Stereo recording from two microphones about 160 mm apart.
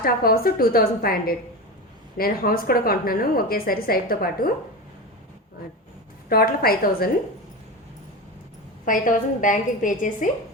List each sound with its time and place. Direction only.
0.0 s a woman's voice: 70° left (ahead or behind)
6.2 s a woman's voice: 65° left (ahead or behind)
8.8 s a woman's voice: 55° left (ahead or behind)